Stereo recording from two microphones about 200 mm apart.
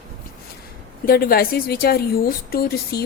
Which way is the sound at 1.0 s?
50° left (ahead or behind).